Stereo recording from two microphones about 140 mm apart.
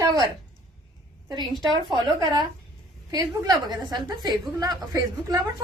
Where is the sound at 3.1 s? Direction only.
30° right (ahead or behind).